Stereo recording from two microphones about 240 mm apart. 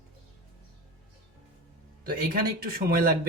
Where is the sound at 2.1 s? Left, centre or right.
Right.